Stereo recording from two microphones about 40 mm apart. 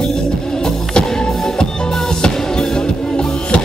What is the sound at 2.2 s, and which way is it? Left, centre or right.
Music, left.